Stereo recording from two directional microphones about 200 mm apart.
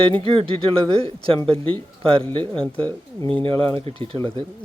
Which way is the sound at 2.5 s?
5° left (ahead or behind).